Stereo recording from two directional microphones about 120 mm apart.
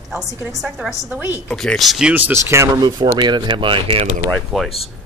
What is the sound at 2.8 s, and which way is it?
Speech, 40° right (ahead or behind).